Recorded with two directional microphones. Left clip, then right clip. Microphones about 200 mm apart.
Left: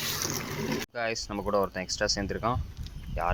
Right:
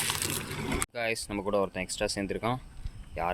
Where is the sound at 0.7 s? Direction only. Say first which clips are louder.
Right 1 dB; 15° right (ahead or behind).